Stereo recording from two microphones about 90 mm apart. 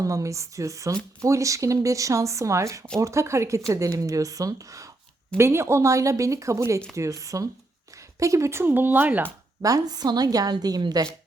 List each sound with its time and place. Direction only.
0.0 s speech: 35° right (ahead or behind); by 9.3 s 20° right (ahead or behind)
9.6 s a woman's voice: 40° right (ahead or behind)